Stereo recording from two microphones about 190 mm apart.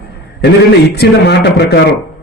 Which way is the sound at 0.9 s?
60° left (ahead or behind).